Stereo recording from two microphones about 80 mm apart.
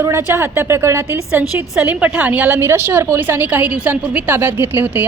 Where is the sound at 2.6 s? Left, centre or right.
Right.